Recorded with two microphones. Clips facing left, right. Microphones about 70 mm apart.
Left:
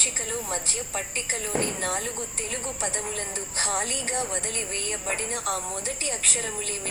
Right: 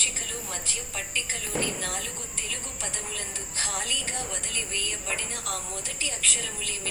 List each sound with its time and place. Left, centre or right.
0.0 s speech: left